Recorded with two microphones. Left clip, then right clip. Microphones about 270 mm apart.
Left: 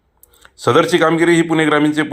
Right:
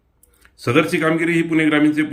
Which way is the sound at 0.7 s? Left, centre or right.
Left.